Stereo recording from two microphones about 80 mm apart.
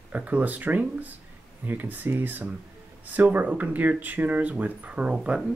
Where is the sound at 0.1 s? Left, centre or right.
Centre.